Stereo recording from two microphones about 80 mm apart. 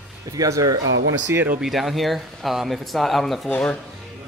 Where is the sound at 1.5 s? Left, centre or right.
Centre.